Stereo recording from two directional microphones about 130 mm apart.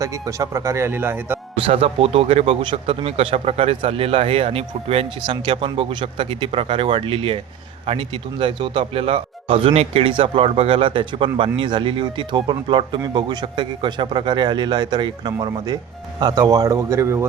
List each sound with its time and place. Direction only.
0.0 s speech: 25° right (ahead or behind)
1.6 s a man's voice: 50° right (ahead or behind); by 17.2 s 20° right (ahead or behind)